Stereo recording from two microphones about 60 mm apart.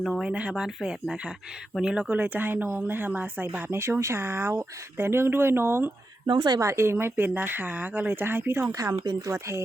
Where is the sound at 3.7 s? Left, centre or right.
Right.